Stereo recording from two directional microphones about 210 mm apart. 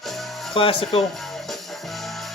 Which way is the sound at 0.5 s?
25° left (ahead or behind).